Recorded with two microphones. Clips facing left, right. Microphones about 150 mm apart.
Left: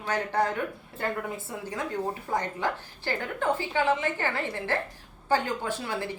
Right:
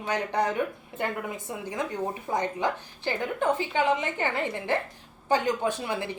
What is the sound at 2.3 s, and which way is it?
A woman's voice, 15° right (ahead or behind).